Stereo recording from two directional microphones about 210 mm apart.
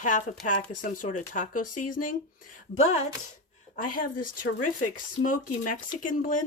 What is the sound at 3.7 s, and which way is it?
Speech, 40° left (ahead or behind).